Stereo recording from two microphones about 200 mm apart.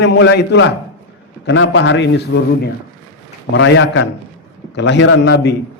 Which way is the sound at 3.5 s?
70° left (ahead or behind).